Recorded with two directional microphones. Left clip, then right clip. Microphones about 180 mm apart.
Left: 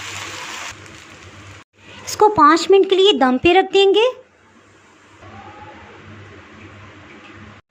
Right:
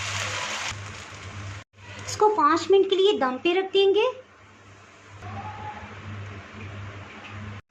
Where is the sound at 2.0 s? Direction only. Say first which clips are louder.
Left 8 dB; 30° left (ahead or behind).